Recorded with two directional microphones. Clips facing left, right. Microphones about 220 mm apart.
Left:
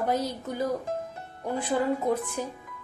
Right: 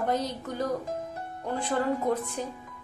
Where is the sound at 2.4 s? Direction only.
10° left (ahead or behind).